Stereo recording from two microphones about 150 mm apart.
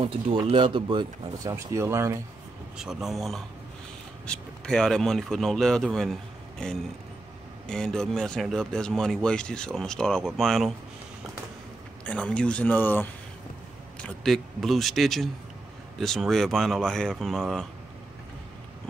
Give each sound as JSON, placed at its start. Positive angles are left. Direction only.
{"t": 0.5, "sound": "speech", "side_deg": -35}
{"t": 2.8, "sound": "speech", "side_deg": -5}
{"t": 12.0, "sound": "speech", "side_deg": 10}
{"t": 14.0, "sound": "speech", "side_deg": 0}